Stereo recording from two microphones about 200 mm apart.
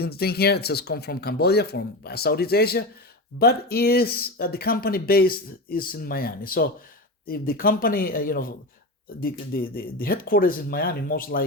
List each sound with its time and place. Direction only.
0.0 s speech: 50° left (ahead or behind)